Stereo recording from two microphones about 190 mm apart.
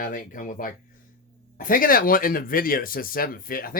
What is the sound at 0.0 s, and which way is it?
Speech, 45° left (ahead or behind).